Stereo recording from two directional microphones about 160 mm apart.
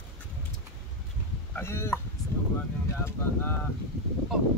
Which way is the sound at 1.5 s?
15° left (ahead or behind).